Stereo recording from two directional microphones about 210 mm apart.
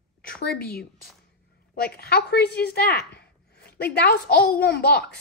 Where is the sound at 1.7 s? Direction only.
45° left (ahead or behind).